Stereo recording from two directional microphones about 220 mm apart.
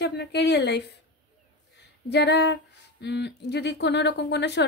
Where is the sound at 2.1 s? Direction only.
50° left (ahead or behind).